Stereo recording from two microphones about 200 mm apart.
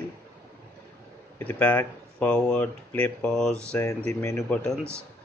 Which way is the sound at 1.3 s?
10° left (ahead or behind).